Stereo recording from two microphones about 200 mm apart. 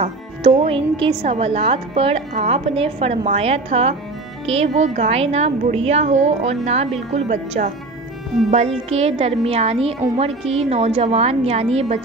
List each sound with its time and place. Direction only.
0.0 s a woman's voice: 30° right (ahead or behind)